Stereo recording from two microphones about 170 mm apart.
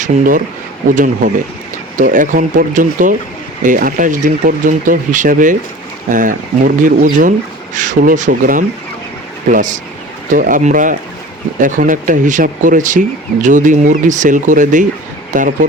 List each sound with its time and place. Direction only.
0.0 s speech: 50° right (ahead or behind)